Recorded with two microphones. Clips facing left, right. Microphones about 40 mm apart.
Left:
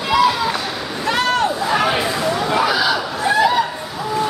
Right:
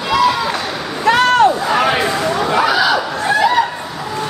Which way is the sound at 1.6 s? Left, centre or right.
Centre.